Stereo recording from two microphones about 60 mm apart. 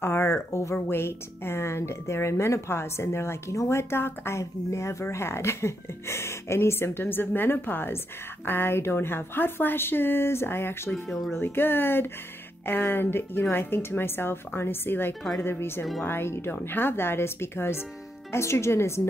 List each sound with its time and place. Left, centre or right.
0.0 s speech: left
4.4 s a woman's voice: left
11.1 s speech: centre
11.3 s a woman's voice: left